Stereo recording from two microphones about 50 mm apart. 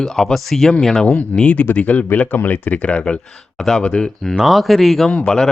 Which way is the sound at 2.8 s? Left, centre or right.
Left.